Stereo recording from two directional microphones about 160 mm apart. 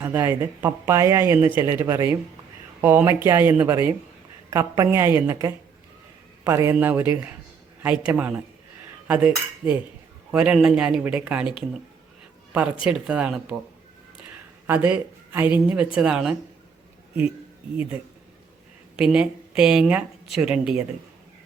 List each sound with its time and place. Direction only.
0.0 s speech: 15° right (ahead or behind)
9.0 s cutlery: 10° right (ahead or behind)
10.3 s speech: 5° right (ahead or behind)
12.5 s speech: 5° right (ahead or behind)
14.7 s speech: 10° right (ahead or behind)
18.9 s speech: 5° right (ahead or behind)